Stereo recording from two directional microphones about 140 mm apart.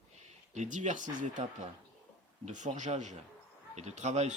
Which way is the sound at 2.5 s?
60° right (ahead or behind).